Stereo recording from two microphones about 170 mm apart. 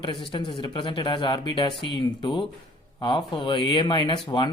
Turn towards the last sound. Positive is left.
turn(degrees=25)  # may be behind; listen again after turning